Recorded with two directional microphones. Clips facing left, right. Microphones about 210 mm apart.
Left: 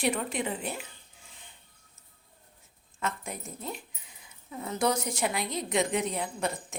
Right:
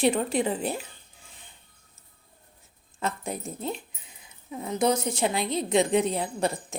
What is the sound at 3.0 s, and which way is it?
Speech, 30° right (ahead or behind).